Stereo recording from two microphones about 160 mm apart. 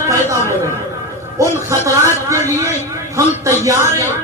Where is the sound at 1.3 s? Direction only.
20° right (ahead or behind).